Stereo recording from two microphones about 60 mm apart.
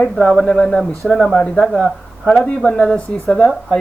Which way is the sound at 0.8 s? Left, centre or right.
Centre.